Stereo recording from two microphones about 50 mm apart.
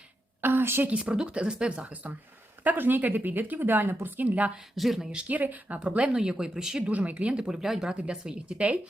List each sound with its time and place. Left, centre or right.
0.4 s a sound: right
0.9 s speech: centre
2.6 s a woman's voice: right
4.7 s speech: centre
5.1 s a woman's voice: right; by 6.8 s centre
6.8 s speech: right; by 7.9 s centre
7.9 s speech: centre